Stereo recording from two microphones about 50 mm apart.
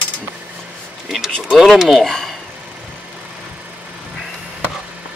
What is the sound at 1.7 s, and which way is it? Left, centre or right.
Speech, centre.